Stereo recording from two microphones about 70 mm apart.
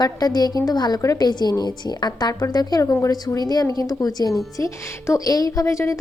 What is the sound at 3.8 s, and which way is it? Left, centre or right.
Speech, left.